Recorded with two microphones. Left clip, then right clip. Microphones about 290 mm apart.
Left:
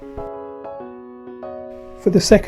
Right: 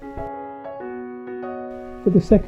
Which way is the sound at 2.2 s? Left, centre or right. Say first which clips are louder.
Left 5 dB; left.